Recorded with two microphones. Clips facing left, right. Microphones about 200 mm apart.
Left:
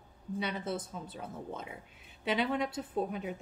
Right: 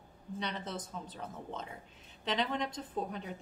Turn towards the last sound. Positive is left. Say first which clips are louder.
# left 4 dB
turn(degrees=10)  # may be behind; listen again after turning